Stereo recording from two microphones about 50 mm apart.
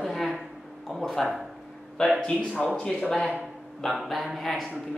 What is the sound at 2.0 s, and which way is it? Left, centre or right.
A woman's voice, centre.